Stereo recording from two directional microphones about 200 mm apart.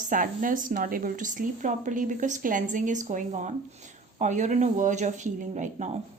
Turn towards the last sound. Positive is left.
turn(degrees=-35)  # may be behind; listen again after turning